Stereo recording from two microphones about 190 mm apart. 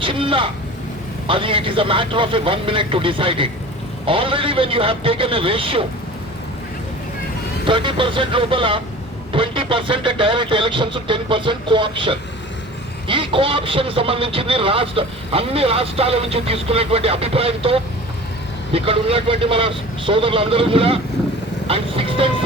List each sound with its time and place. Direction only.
0.0 s a man's voice: 25° right (ahead or behind)
7.7 s a man's voice: 25° right (ahead or behind)